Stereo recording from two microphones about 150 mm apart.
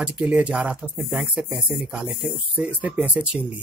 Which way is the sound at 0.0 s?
10° right (ahead or behind).